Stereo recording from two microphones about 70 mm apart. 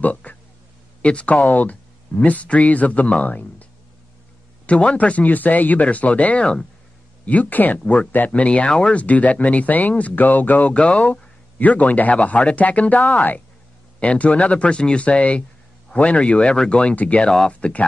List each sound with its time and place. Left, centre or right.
0.0 s speech: left
4.6 s speech: centre